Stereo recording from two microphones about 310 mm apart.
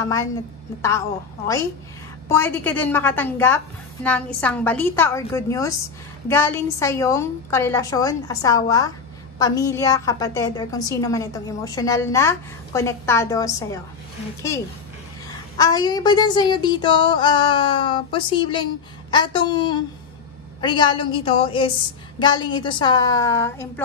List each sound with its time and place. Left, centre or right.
2.2 s a woman's voice: centre
15.5 s a woman's voice: centre